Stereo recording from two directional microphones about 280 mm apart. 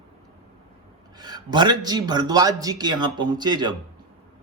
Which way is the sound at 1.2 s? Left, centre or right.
Centre.